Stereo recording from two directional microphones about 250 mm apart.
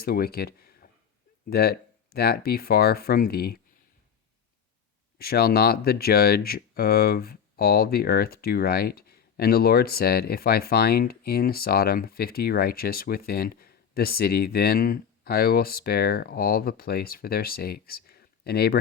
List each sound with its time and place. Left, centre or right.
0.0 s speech: left
5.1 s speech: left